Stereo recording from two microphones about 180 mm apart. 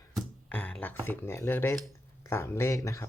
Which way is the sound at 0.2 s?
5° left (ahead or behind).